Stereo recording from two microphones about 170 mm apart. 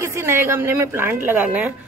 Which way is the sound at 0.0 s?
15° right (ahead or behind).